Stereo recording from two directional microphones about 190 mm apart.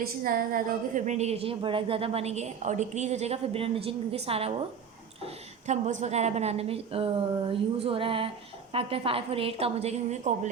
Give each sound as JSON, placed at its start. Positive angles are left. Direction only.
{"t": 0.2, "sound": "a woman's voice", "side_deg": -50}